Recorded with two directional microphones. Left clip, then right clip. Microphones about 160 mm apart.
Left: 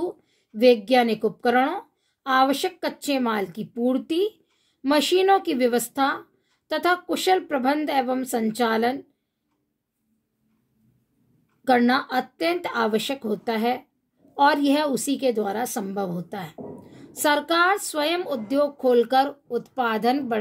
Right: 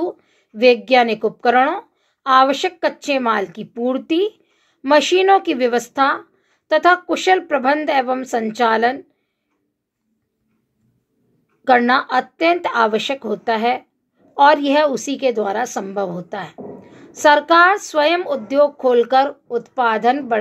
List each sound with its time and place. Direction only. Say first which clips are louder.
0.0 s a woman's voice: right 6 dB; 30° left (ahead or behind)
11.6 s a woman's voice: right 6 dB; 30° left (ahead or behind)